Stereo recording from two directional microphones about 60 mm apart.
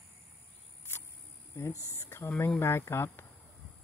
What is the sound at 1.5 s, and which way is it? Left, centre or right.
Speech, left.